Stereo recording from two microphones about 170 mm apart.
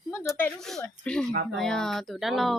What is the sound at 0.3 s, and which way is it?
Speech, 5° left (ahead or behind).